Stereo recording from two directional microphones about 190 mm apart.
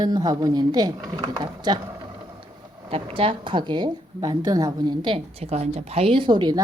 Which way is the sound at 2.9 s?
30° right (ahead or behind).